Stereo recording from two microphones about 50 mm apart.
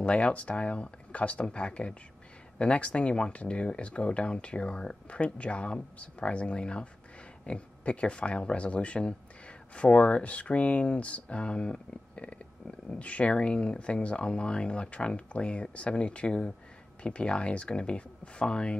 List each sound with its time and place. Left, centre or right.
0.0 s speech: left